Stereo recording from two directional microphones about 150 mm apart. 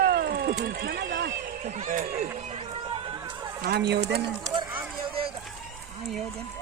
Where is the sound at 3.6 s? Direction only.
90° right.